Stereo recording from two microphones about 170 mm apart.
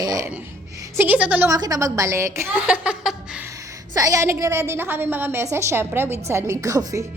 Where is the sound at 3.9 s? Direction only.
20° right (ahead or behind).